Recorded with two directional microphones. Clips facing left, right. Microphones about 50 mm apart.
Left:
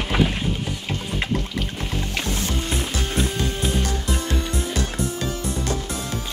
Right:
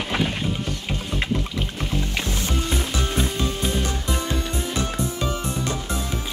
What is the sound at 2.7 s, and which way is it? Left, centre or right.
Music, centre.